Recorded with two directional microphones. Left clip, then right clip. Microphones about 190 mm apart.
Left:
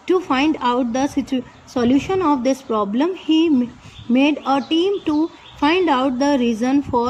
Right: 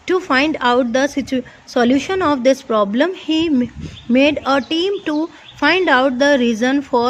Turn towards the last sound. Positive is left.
turn(degrees=-40)  # may be behind; listen again after turning